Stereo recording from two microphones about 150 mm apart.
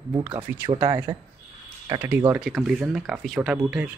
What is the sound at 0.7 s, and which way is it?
Speech, 30° right (ahead or behind).